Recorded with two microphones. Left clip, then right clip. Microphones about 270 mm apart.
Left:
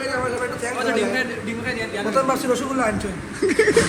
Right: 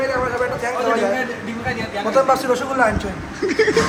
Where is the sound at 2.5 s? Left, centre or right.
Right.